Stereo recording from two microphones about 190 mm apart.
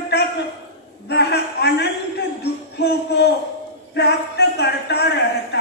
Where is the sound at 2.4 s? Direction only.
60° left (ahead or behind).